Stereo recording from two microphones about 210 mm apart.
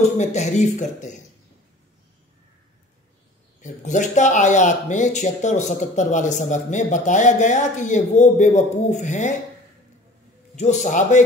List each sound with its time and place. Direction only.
0.0 s speech: 35° left (ahead or behind)
3.6 s speech: 35° left (ahead or behind)
10.5 s speech: 35° left (ahead or behind)